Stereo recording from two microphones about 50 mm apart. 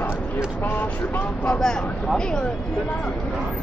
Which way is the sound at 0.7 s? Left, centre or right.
Left.